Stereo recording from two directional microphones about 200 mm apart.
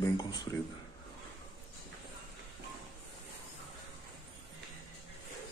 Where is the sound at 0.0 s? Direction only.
20° left (ahead or behind).